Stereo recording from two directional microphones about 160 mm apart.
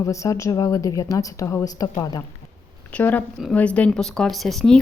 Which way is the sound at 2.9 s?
10° left (ahead or behind).